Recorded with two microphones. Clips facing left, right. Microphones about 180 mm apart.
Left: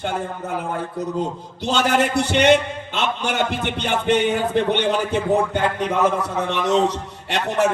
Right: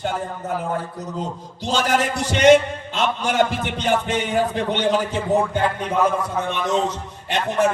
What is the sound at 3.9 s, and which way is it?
Speech, 65° left (ahead or behind).